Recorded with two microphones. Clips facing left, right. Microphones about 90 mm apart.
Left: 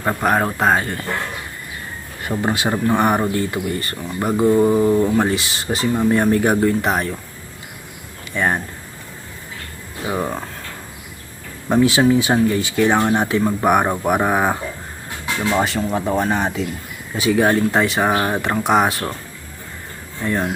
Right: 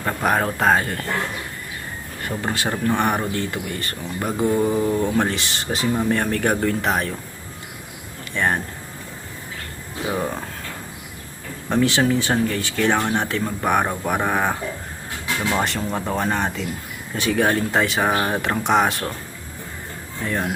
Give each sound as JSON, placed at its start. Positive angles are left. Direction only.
{"t": 0.2, "sound": "speech", "side_deg": 5}
{"t": 2.2, "sound": "speech", "side_deg": 15}
{"t": 2.9, "sound": "speech", "side_deg": 5}
{"t": 8.3, "sound": "speech", "side_deg": 5}
{"t": 10.2, "sound": "speech", "side_deg": 5}
{"t": 11.7, "sound": "speech", "side_deg": 10}
{"t": 15.5, "sound": "speech", "side_deg": 5}
{"t": 20.2, "sound": "speech", "side_deg": 0}